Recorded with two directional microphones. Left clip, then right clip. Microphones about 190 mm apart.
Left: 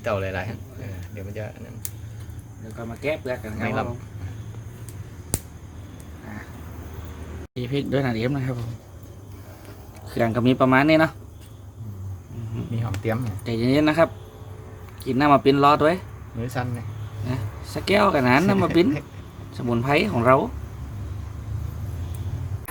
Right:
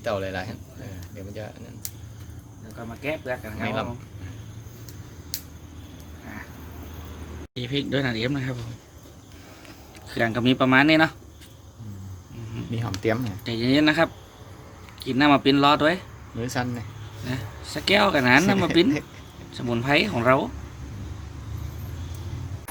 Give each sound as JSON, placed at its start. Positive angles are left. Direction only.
{"t": 0.0, "sound": "speech", "side_deg": 0}
{"t": 3.6, "sound": "speech", "side_deg": 0}
{"t": 7.5, "sound": "speech", "side_deg": 10}
{"t": 10.1, "sound": "speech", "side_deg": 10}
{"t": 12.8, "sound": "speech", "side_deg": -50}
{"t": 13.4, "sound": "speech", "side_deg": 5}
{"t": 16.4, "sound": "speech", "side_deg": -50}
{"t": 17.2, "sound": "speech", "side_deg": 5}